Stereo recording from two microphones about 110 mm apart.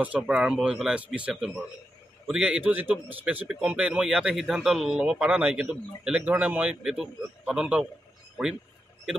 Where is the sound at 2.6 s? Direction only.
15° right (ahead or behind).